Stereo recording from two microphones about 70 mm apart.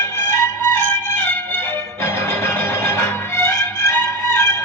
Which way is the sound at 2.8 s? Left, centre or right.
Left.